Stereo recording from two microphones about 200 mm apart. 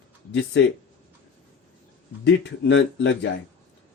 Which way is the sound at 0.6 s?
65° left (ahead or behind).